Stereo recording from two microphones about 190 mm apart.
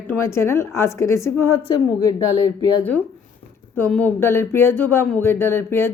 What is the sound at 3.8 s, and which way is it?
Speech, 10° left (ahead or behind).